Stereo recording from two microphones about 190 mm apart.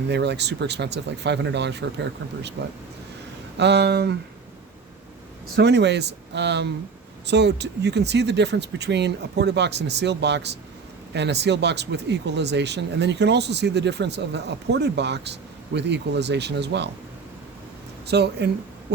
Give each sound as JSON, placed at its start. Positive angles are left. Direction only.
{"t": 0.1, "sound": "speech", "side_deg": -65}
{"t": 5.5, "sound": "speech", "side_deg": -65}
{"t": 18.1, "sound": "speech", "side_deg": -60}